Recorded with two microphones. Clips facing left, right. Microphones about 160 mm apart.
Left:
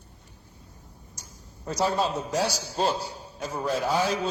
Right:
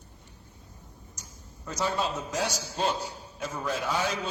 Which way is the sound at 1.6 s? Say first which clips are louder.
Left 4 dB; 35° left (ahead or behind).